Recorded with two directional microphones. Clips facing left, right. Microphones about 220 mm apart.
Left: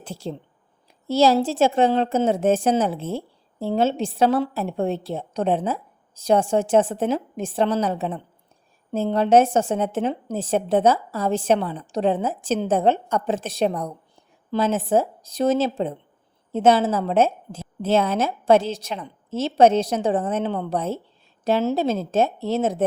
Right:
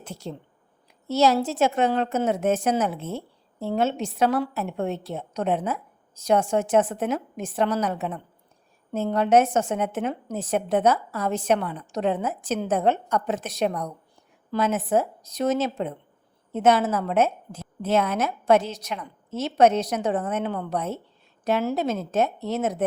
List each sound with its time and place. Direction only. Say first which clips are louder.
0.0 s a woman's voice: left 4 dB; 30° left (ahead or behind)